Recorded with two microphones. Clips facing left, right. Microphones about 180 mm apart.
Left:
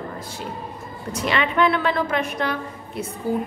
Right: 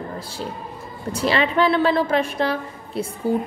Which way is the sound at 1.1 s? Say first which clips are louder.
Right 2 dB; 30° right (ahead or behind).